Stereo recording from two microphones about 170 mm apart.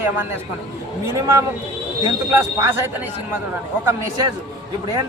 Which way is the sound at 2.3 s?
15° right (ahead or behind).